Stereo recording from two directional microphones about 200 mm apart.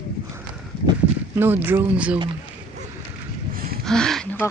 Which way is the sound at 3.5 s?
45° right (ahead or behind).